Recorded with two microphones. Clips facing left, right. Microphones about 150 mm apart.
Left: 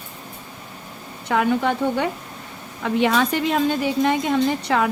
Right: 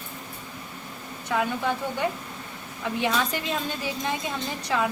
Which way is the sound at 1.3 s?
70° left (ahead or behind).